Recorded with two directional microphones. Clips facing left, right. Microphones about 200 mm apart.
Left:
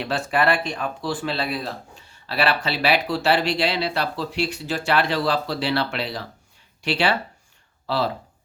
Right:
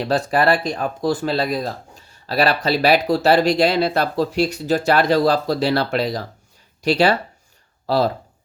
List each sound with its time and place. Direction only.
0.0 s speech: 40° right (ahead or behind)